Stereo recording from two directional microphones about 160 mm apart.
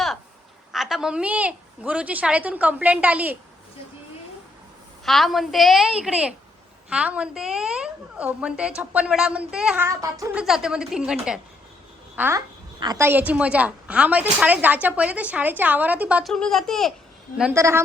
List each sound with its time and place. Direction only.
0.7 s a woman's voice: centre (ahead or behind)
5.0 s a woman's voice: centre (ahead or behind)
9.8 s a sound: 20° right (ahead or behind)
10.3 s a woman's voice: 5° right (ahead or behind)
12.8 s a sound: 25° right (ahead or behind)
13.1 s a woman's voice: 10° right (ahead or behind)
16.3 s a woman's voice: centre (ahead or behind)
17.5 s a woman's voice: 15° right (ahead or behind)